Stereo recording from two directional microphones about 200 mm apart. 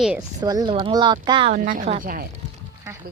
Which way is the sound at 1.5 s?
40° right (ahead or behind).